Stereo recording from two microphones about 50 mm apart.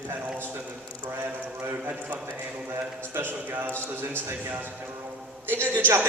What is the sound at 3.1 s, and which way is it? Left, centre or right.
A man's voice, right.